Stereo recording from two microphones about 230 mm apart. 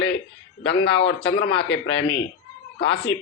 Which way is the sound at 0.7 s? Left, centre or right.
Left.